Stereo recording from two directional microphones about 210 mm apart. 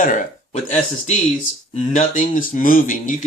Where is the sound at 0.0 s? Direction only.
35° left (ahead or behind).